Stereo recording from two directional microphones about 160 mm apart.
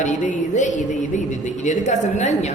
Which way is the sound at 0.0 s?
50° left (ahead or behind).